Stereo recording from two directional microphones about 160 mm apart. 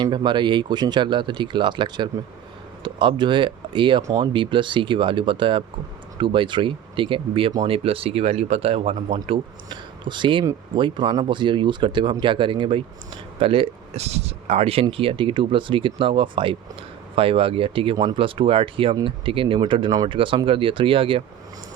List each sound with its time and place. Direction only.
0.0 s speech: 30° right (ahead or behind)